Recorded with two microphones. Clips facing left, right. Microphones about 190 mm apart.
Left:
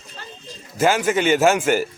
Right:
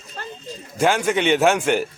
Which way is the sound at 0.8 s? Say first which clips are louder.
Left 1 dB; 5° left (ahead or behind).